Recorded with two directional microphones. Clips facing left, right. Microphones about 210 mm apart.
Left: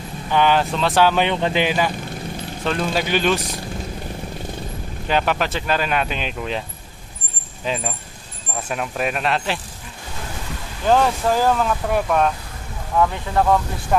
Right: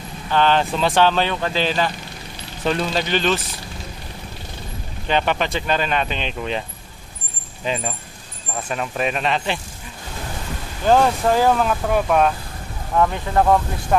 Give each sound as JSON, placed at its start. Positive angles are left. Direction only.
{"t": 0.3, "sound": "speech", "side_deg": 10}
{"t": 2.6, "sound": "speech", "side_deg": 0}
{"t": 5.0, "sound": "speech", "side_deg": 5}
{"t": 7.6, "sound": "speech", "side_deg": 0}
{"t": 10.9, "sound": "speech", "side_deg": 0}